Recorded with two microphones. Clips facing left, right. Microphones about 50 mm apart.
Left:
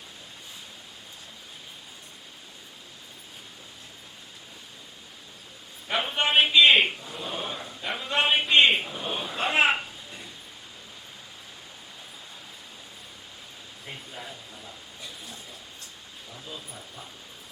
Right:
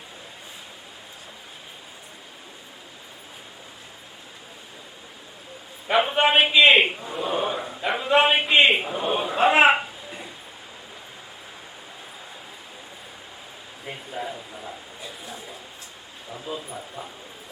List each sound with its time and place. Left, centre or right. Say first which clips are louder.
6.1 s a man's voice: right 1 dB; centre
6.8 s a man's voice: right 4 dB; right
7.2 s a sound: right 10 dB; centre
8.1 s a man's voice: right 4 dB; centre
8.8 s a man's voice: right 7 dB; centre
9.2 s a man's voice: right 7 dB; centre
13.8 s a sound: right 8 dB; centre
16.3 s speech: right 9 dB; right